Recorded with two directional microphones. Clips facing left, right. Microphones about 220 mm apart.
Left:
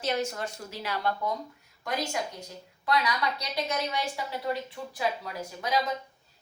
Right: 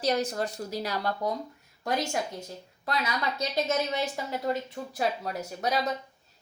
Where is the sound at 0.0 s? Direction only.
35° right (ahead or behind).